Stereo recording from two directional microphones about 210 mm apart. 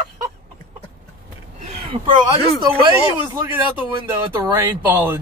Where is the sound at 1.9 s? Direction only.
25° right (ahead or behind).